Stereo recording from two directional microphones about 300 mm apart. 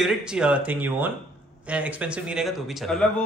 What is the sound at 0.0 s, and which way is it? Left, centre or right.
Speech, centre.